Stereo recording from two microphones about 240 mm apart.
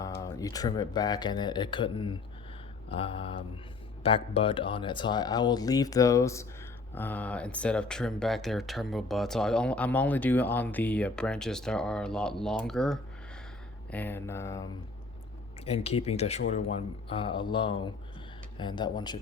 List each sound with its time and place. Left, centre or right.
0.0 s speech: centre
15.6 s speech: left